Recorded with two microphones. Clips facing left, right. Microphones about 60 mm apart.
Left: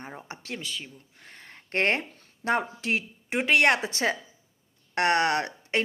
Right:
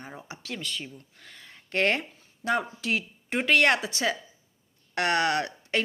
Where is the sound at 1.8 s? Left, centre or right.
Left.